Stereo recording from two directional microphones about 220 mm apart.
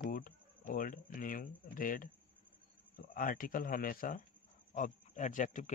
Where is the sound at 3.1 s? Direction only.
40° left (ahead or behind).